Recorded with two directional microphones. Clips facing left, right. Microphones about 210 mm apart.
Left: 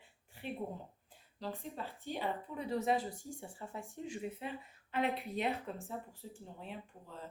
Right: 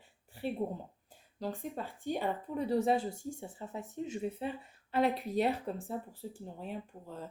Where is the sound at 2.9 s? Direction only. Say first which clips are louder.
Right 4 dB; 25° right (ahead or behind); by 7.1 s 40° right (ahead or behind).